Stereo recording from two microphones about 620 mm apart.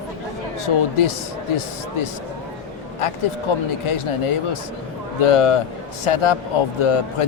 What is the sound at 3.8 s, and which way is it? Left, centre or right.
Speech, left.